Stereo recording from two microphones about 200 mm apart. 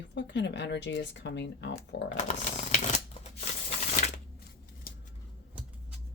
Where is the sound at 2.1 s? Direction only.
35° left (ahead or behind).